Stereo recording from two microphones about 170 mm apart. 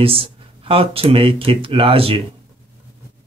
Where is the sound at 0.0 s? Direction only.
35° right (ahead or behind).